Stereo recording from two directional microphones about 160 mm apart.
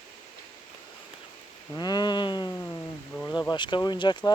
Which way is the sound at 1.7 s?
25° left (ahead or behind).